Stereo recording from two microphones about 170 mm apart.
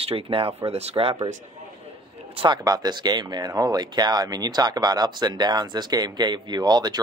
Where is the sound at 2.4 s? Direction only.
25° right (ahead or behind).